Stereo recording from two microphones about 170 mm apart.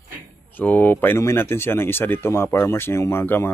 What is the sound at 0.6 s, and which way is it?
Speech, 10° left (ahead or behind).